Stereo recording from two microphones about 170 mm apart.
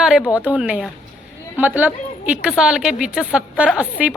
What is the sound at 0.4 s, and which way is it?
Speech, 5° right (ahead or behind).